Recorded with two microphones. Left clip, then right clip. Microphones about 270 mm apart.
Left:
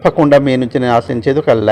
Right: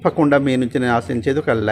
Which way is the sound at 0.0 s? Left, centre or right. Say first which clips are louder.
Left 6 dB; centre.